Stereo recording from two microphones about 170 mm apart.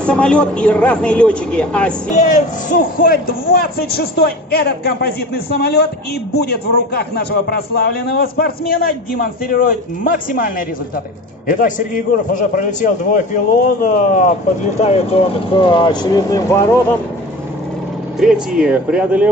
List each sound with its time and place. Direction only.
0.0 s speech: 5° left (ahead or behind)
2.1 s a man's voice: 45° left (ahead or behind); by 16.7 s 15° left (ahead or behind)
18.2 s speech: 5° right (ahead or behind)